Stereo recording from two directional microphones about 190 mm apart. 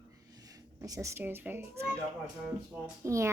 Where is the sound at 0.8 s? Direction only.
15° right (ahead or behind).